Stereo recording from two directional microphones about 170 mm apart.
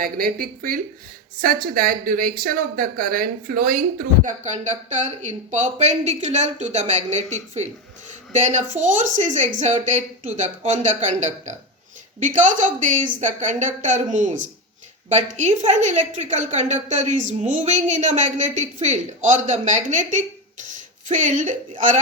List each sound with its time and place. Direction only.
0.0 s speech: 60° right (ahead or behind)
15.4 s speech: 45° right (ahead or behind)